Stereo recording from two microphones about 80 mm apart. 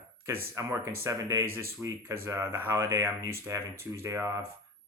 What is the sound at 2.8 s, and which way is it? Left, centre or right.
Speech, right.